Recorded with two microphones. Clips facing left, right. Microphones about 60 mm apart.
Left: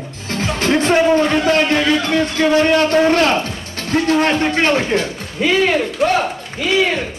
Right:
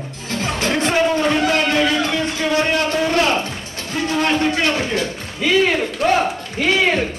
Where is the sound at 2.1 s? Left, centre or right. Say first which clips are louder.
Left 5 dB; left.